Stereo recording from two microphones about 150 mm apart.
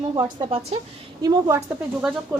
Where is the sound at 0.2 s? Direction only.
35° right (ahead or behind).